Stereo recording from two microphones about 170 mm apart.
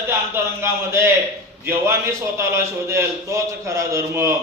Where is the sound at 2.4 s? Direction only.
15° right (ahead or behind).